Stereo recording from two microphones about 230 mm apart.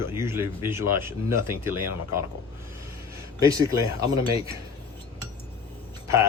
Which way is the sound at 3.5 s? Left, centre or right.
Centre.